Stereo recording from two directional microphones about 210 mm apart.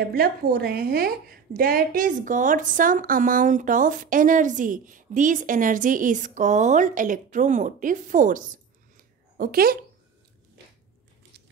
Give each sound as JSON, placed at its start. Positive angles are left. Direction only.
{"t": 0.1, "sound": "a woman's voice", "side_deg": -45}